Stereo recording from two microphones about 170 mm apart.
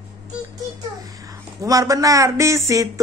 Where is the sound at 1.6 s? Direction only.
20° right (ahead or behind).